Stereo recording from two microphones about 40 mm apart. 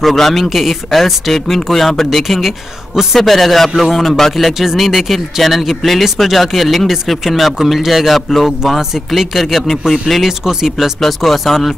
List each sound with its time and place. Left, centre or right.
0.0 s speech: centre
3.2 s speech: centre
11.0 s speech: centre